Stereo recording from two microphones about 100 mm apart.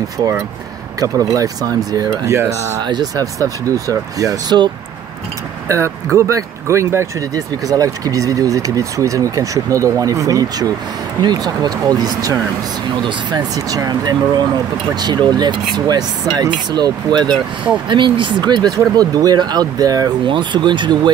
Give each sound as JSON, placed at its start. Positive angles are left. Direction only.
{"t": 0.9, "sound": "speech", "side_deg": -35}
{"t": 2.8, "sound": "speech", "side_deg": -45}
{"t": 6.1, "sound": "speech", "side_deg": -30}
{"t": 20.2, "sound": "speech", "side_deg": -50}